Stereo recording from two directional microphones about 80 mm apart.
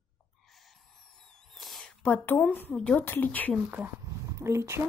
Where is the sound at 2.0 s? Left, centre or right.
Left.